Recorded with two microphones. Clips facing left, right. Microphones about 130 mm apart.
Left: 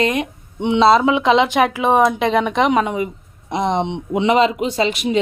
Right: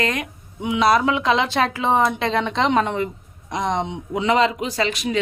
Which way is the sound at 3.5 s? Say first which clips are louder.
Left 4 dB; 20° left (ahead or behind).